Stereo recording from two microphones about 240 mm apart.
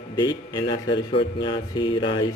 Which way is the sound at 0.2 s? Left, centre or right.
Centre.